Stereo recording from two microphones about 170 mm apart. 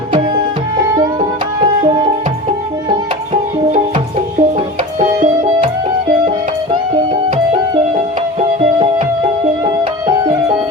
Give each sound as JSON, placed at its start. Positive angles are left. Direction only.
{"t": 1.6, "sound": "music", "side_deg": -30}
{"t": 4.9, "sound": "music", "side_deg": -50}
{"t": 8.4, "sound": "music", "side_deg": -30}